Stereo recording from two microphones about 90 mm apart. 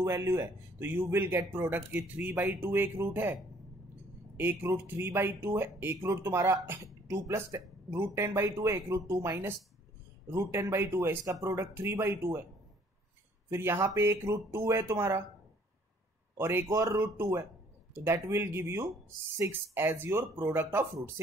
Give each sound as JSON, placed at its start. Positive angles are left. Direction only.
{"t": 0.0, "sound": "speech", "side_deg": -30}
{"t": 4.4, "sound": "speech", "side_deg": -25}
{"t": 13.5, "sound": "speech", "side_deg": -25}
{"t": 16.3, "sound": "speech", "side_deg": -30}
{"t": 16.7, "sound": "speech", "side_deg": -40}
{"t": 17.0, "sound": "speech", "side_deg": -30}